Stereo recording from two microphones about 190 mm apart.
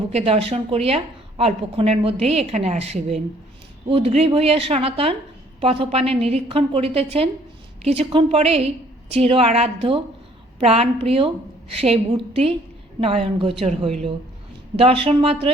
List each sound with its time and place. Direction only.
0.1 s a woman's voice: 30° right (ahead or behind)